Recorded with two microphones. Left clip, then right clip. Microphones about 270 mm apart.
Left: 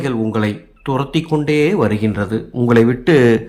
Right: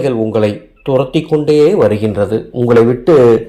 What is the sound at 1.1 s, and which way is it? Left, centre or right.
Speech, centre.